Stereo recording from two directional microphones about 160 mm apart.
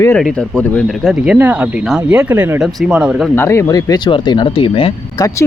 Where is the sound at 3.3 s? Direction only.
15° left (ahead or behind); by 4.9 s 30° left (ahead or behind).